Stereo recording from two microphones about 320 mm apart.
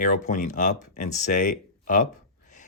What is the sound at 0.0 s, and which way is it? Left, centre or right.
Speech, left.